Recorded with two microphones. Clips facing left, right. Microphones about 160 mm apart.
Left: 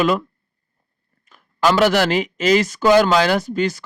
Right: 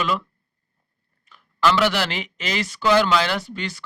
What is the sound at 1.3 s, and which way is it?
A man's voice, 40° left (ahead or behind).